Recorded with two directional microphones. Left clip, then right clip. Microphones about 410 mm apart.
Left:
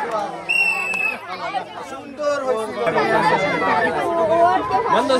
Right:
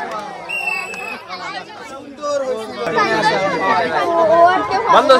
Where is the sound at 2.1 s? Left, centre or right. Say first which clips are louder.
Even; centre.